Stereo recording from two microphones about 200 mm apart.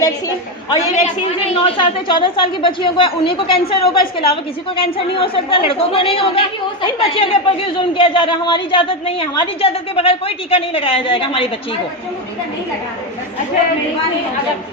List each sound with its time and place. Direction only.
0.0 s speech: 20° left (ahead or behind)